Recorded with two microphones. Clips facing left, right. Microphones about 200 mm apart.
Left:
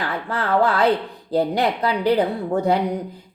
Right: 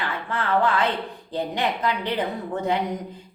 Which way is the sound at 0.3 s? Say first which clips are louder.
Left 3 dB; 35° left (ahead or behind).